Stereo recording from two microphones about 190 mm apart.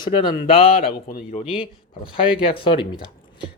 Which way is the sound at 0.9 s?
45° left (ahead or behind).